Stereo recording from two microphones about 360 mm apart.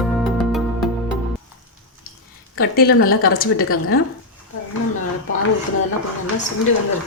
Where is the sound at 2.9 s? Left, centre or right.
Left.